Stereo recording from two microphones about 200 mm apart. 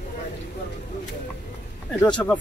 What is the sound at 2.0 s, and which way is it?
Speech, 5° left (ahead or behind).